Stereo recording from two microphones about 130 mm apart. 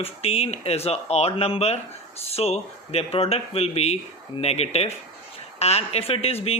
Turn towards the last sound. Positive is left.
turn(degrees=50)  # may be behind; listen again after turning